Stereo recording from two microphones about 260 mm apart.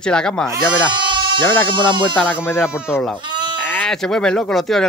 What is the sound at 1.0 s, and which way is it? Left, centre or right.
Bleat, centre.